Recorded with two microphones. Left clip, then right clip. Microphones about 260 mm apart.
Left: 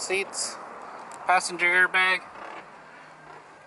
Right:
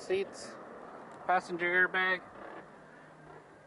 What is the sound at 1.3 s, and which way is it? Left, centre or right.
Speech, centre.